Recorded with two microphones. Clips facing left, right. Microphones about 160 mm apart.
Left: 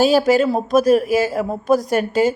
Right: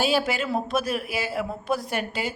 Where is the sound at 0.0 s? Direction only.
40° left (ahead or behind).